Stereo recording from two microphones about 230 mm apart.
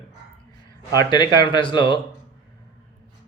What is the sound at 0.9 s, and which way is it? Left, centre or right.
A man's voice, centre.